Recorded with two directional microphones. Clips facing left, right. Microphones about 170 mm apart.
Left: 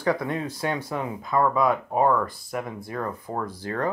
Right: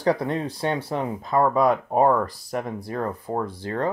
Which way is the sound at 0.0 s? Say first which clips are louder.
Right 2 dB; 35° right (ahead or behind).